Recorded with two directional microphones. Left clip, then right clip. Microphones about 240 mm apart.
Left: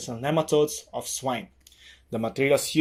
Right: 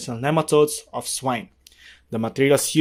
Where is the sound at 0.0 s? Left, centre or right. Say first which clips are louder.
Right 4 dB; right.